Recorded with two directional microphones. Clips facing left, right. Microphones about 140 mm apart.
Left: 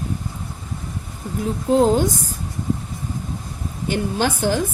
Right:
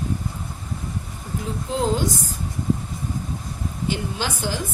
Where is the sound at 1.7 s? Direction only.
50° left (ahead or behind).